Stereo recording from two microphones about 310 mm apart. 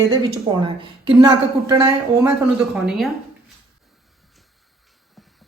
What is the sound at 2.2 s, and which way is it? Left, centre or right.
Speech, centre.